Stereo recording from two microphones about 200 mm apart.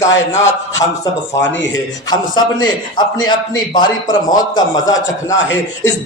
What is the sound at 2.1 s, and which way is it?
A man's voice, 20° left (ahead or behind).